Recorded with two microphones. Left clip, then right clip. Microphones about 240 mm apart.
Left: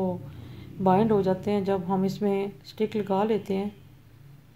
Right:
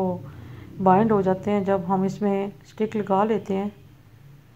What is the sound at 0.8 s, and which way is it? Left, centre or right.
Speech, centre.